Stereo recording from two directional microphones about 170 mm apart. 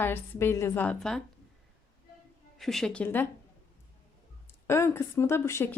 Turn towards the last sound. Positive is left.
turn(degrees=15)  # may be behind; listen again after turning